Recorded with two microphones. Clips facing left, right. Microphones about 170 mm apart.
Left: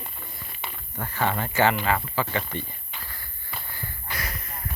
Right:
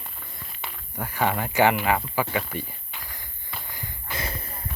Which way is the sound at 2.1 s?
10° right (ahead or behind).